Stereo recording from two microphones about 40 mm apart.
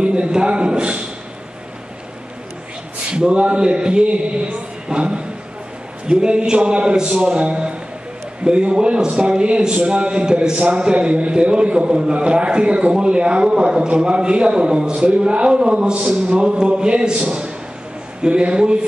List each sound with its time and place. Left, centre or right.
0.0 s a man's voice: right
3.1 s a man's voice: right